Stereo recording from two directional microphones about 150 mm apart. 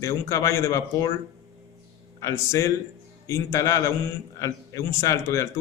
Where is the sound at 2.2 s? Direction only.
20° left (ahead or behind).